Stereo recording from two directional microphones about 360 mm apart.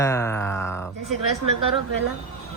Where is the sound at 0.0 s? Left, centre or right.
Centre.